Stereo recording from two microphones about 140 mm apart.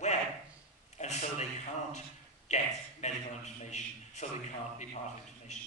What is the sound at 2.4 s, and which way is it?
A man's voice, 55° left (ahead or behind).